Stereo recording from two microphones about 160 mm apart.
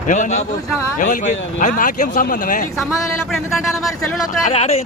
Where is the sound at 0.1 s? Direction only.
50° left (ahead or behind).